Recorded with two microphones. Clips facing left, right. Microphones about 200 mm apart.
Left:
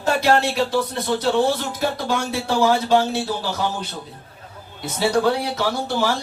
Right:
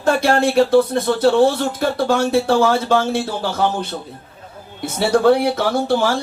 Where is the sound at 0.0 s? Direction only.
50° right (ahead or behind).